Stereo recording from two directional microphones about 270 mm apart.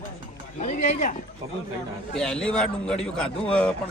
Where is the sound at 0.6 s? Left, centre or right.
Left.